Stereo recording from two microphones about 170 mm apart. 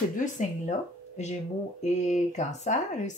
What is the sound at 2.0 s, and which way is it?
Speech, 45° left (ahead or behind).